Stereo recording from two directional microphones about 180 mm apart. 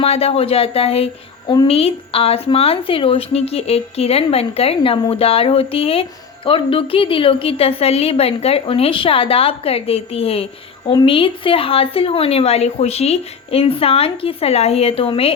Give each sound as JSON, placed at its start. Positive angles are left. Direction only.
{"t": 0.0, "sound": "speech", "side_deg": 35}